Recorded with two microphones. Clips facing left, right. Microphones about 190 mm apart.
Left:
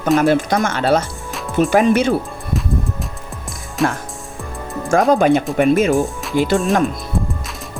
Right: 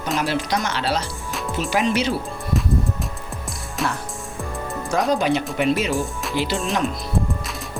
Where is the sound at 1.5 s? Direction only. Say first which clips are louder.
Left 8 dB; 50° left (ahead or behind).